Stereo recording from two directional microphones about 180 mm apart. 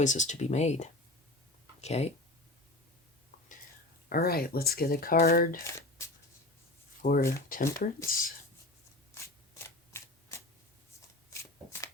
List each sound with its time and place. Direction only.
0.0 s speech: 40° left (ahead or behind)
4.1 s speech: 55° left (ahead or behind)
7.0 s speech: 55° left (ahead or behind)
9.6 s shuffling cards: 15° left (ahead or behind)